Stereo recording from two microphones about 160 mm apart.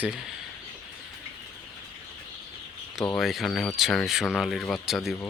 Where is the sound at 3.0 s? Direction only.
5° left (ahead or behind).